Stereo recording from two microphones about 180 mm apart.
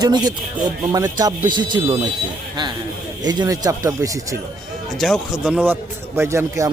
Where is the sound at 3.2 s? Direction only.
25° right (ahead or behind).